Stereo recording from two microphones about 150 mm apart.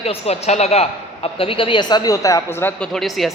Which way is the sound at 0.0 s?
45° left (ahead or behind).